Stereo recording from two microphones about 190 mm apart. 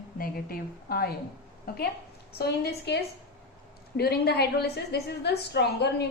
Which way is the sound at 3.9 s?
55° left (ahead or behind).